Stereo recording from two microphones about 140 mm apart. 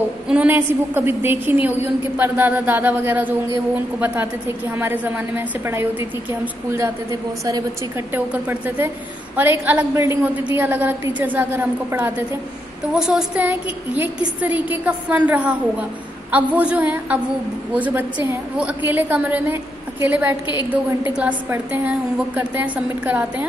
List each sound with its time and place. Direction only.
0.3 s a woman's voice: 10° right (ahead or behind)
8.1 s a woman's voice: 15° right (ahead or behind)